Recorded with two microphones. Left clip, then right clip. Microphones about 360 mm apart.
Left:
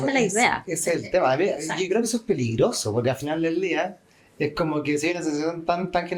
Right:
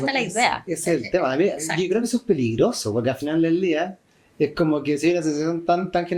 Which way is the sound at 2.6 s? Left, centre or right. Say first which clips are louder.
Right 1 dB; centre.